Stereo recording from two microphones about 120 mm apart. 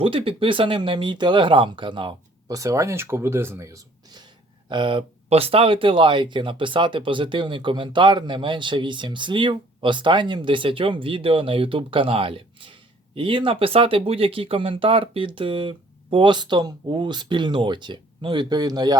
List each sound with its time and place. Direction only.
0.0 s speech: 50° right (ahead or behind)
2.5 s speech: 25° right (ahead or behind)
4.7 s speech: 45° right (ahead or behind)